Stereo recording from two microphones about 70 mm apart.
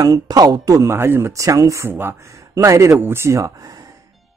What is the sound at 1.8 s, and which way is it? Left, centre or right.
Speech, right.